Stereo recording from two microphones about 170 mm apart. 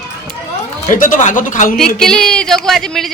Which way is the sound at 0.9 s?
50° left (ahead or behind).